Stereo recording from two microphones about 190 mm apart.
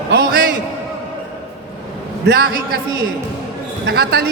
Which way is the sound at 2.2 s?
55° right (ahead or behind).